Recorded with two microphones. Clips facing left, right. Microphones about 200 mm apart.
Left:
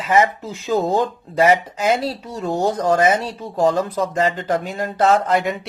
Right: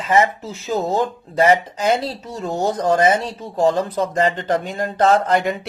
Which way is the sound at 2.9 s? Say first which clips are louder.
Right 1 dB; 30° right (ahead or behind).